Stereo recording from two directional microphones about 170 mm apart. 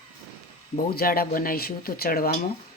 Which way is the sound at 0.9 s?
60° left (ahead or behind).